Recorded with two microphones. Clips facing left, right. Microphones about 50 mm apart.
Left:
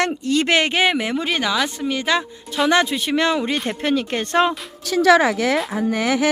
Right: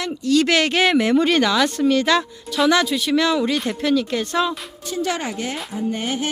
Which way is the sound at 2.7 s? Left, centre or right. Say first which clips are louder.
Left 2 dB; left.